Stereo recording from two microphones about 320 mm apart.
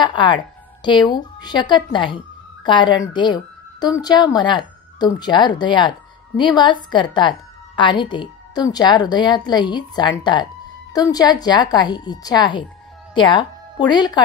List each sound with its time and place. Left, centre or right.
0.0 s a woman's voice: centre